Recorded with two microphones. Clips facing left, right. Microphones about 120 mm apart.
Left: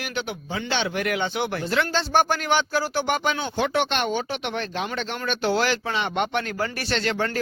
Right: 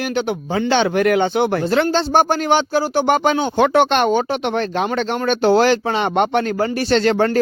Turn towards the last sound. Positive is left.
turn(degrees=-35)  # may be behind; listen again after turning